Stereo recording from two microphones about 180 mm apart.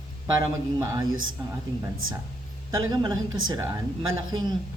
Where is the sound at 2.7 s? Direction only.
20° right (ahead or behind).